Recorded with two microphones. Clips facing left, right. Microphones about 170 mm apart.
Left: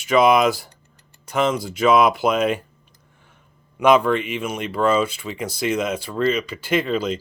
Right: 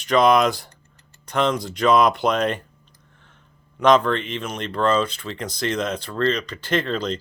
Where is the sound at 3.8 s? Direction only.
10° left (ahead or behind).